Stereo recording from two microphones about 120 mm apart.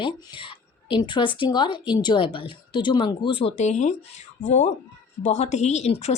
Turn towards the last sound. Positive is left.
turn(degrees=65)  # may be behind; listen again after turning